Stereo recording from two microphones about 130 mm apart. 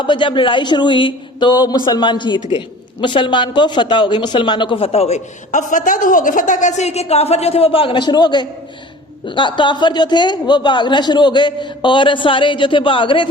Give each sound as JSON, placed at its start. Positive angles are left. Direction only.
{"t": 0.0, "sound": "a man's voice", "side_deg": 40}